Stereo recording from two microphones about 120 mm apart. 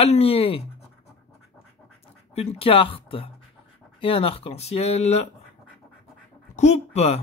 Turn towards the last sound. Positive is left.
turn(degrees=65)  # may be behind; listen again after turning